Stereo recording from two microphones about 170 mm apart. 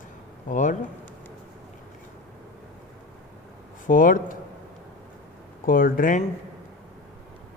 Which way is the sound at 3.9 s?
50° left (ahead or behind).